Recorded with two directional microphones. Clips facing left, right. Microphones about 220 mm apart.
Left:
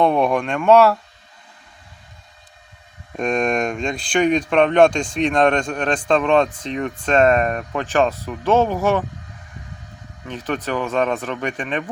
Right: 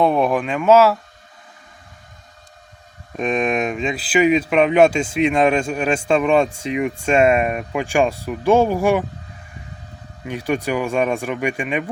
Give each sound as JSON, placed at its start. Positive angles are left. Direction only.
{"t": 0.0, "sound": "speech", "side_deg": -5}
{"t": 3.2, "sound": "speech", "side_deg": 0}
{"t": 10.2, "sound": "speech", "side_deg": -10}